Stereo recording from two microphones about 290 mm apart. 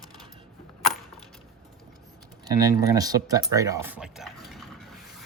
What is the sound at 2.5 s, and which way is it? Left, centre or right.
Speech, centre.